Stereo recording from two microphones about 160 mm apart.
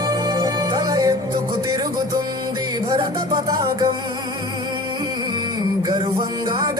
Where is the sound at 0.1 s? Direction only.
25° right (ahead or behind).